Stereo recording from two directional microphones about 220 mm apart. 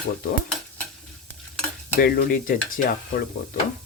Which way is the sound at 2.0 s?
40° left (ahead or behind).